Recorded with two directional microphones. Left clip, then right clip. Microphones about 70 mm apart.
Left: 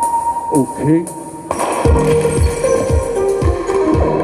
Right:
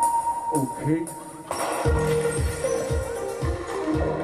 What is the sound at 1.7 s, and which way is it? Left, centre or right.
Music, left.